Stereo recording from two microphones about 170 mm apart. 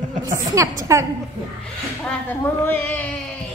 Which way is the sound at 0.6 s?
20° right (ahead or behind).